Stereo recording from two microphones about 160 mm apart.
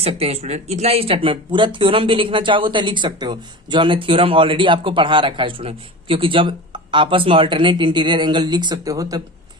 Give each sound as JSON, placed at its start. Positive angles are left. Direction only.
{"t": 0.0, "sound": "speech", "side_deg": -40}